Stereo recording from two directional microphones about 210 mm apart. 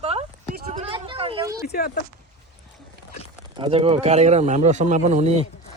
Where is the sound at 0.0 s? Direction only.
30° right (ahead or behind).